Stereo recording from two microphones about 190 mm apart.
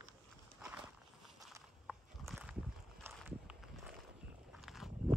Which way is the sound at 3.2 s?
5° right (ahead or behind).